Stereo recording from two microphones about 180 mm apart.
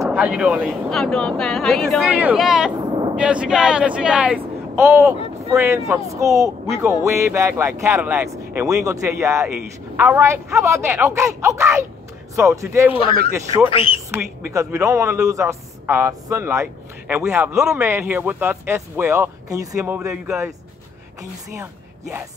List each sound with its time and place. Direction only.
0.0 s speech: 5° right (ahead or behind)
13.7 s speech: 30° left (ahead or behind)
14.1 s speech: 15° right (ahead or behind)